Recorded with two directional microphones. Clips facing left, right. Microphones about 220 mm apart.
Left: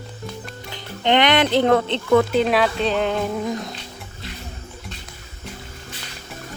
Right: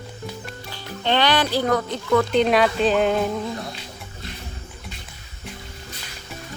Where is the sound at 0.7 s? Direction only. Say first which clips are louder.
Left 4 dB; 20° left (ahead or behind).